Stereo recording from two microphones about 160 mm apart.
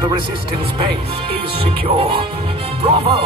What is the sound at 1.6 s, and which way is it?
Speech, 35° right (ahead or behind).